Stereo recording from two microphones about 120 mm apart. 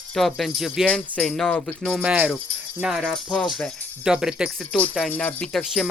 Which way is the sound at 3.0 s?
5° left (ahead or behind).